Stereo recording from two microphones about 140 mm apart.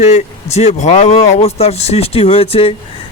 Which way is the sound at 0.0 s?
50° left (ahead or behind).